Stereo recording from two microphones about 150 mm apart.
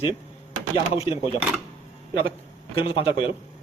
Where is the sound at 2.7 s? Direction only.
35° left (ahead or behind).